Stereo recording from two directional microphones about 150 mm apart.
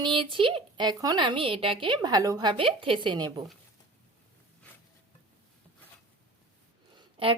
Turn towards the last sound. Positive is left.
turn(degrees=-35)  # may be behind; listen again after turning